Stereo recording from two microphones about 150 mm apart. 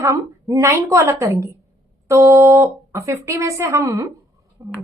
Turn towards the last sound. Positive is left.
turn(degrees=-20)  # may be behind; listen again after turning